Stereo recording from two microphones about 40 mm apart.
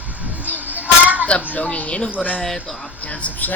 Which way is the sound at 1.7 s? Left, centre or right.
Left.